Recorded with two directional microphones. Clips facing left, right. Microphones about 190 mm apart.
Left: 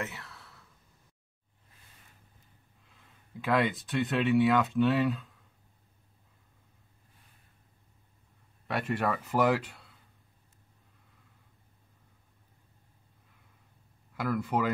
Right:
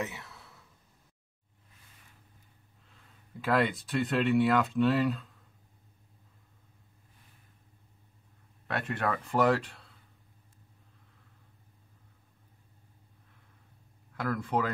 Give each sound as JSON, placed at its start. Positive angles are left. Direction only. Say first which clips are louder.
{"t": 0.0, "sound": "a sound", "louder": "right 2 dB", "side_deg": -15}
{"t": 3.3, "sound": "speech", "louder": "even", "side_deg": 0}
{"t": 8.6, "sound": "speech", "louder": "left 2 dB", "side_deg": 5}
{"t": 14.1, "sound": "speech", "louder": "left 1 dB", "side_deg": 5}